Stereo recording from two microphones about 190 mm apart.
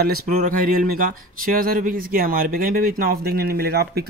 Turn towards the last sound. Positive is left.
turn(degrees=-55)  # may be behind; listen again after turning